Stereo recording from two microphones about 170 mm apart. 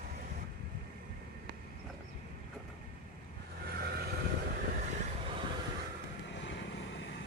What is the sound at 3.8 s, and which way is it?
Vehicle, 65° right (ahead or behind).